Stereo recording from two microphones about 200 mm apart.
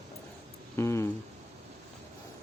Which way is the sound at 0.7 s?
15° left (ahead or behind).